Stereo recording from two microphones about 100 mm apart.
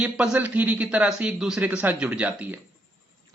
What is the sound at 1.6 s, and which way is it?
Speech, 15° right (ahead or behind).